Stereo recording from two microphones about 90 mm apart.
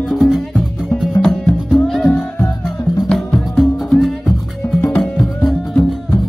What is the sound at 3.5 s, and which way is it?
Music, 5° left (ahead or behind).